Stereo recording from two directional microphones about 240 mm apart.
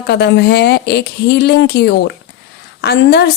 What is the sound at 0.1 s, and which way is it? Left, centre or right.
Speech, left.